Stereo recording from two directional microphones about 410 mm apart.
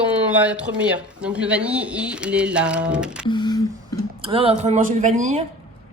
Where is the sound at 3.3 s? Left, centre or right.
Centre.